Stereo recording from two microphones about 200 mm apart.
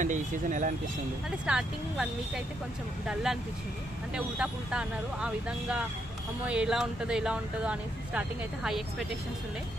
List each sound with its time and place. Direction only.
0.0 s speech: 40° right (ahead or behind)
1.4 s speech: 5° right (ahead or behind)